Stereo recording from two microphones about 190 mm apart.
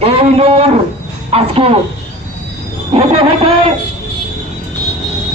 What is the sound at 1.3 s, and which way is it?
Speech, 30° right (ahead or behind).